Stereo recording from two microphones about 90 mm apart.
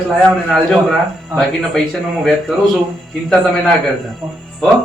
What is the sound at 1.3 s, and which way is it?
A man's voice, centre (ahead or behind).